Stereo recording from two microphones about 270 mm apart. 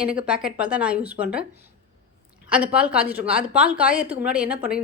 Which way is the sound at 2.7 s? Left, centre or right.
Centre.